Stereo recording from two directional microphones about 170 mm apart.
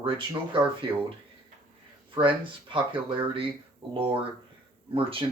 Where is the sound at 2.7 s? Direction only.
30° right (ahead or behind).